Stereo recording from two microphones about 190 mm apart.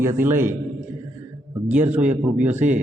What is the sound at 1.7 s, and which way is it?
Speech, 10° right (ahead or behind).